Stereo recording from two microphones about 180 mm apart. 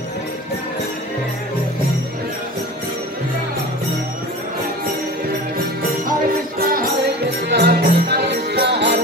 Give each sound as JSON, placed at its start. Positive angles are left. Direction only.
{"t": 6.6, "sound": "music", "side_deg": -55}
{"t": 7.4, "sound": "music", "side_deg": -65}